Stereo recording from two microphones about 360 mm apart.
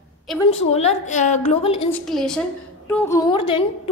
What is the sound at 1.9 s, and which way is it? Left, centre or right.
A woman's voice, centre.